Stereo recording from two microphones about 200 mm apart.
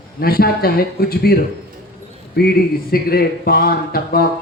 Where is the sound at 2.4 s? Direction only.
50° left (ahead or behind).